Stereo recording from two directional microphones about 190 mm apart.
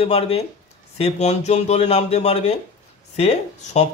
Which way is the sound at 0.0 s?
30° left (ahead or behind).